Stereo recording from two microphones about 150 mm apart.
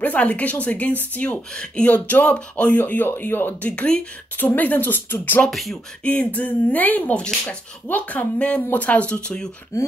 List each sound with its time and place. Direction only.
0.0 s speech: 10° left (ahead or behind)
5.5 s speech: centre (ahead or behind)
9.7 s speech: 15° left (ahead or behind)